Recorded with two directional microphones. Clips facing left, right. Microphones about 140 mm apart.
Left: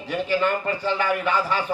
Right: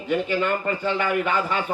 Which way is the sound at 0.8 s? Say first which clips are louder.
Even; 30° right (ahead or behind).